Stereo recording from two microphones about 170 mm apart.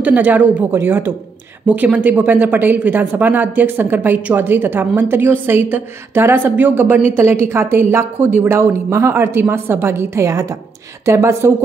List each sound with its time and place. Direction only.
0.0 s speech: 10° right (ahead or behind)